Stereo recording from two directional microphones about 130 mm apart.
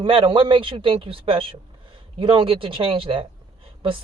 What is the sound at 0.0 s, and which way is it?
A man's voice, 40° right (ahead or behind).